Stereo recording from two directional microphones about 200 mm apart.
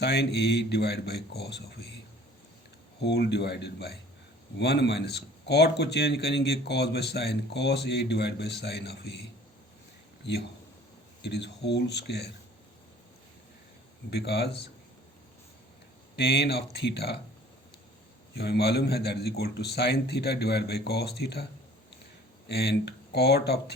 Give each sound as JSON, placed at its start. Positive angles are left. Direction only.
{"t": 0.0, "sound": "a man's voice", "side_deg": 55}
{"t": 3.0, "sound": "a man's voice", "side_deg": 55}
{"t": 11.2, "sound": "a man's voice", "side_deg": 60}
{"t": 14.1, "sound": "a man's voice", "side_deg": 55}
{"t": 16.1, "sound": "a man's voice", "side_deg": 55}
{"t": 18.3, "sound": "a man's voice", "side_deg": 55}
{"t": 22.4, "sound": "a man's voice", "side_deg": 55}